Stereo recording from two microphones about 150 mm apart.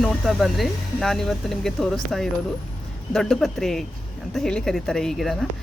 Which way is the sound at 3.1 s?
Centre (ahead or behind).